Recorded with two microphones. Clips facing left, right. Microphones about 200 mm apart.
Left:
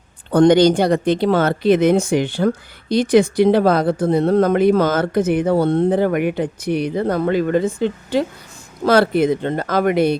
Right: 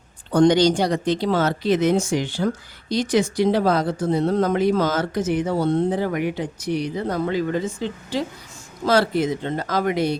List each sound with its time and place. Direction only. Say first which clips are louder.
0.3 s speech: left 4 dB; 55° left (ahead or behind)